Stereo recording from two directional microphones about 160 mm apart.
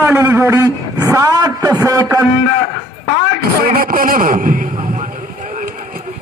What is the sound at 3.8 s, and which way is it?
A man's voice, 60° right (ahead or behind).